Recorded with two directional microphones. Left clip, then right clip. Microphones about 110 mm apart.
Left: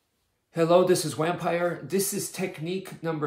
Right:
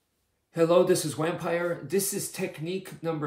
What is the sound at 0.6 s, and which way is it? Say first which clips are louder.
Speech: left 1 dB; 15° left (ahead or behind).